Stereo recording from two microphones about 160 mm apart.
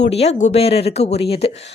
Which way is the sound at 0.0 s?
40° left (ahead or behind).